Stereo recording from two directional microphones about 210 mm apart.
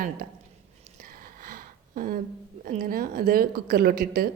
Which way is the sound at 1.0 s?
40° right (ahead or behind).